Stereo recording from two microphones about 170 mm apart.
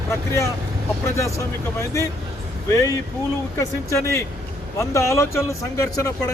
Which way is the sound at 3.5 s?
15° left (ahead or behind).